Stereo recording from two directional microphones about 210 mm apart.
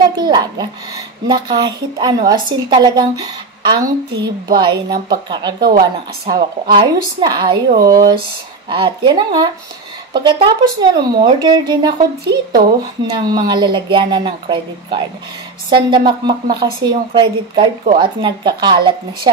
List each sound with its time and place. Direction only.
0.2 s a sound: 20° right (ahead or behind)
1.2 s speech: 20° right (ahead or behind)
16.1 s speech: 20° right (ahead or behind)